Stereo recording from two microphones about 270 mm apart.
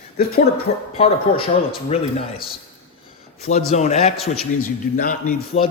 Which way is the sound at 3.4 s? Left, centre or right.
Left.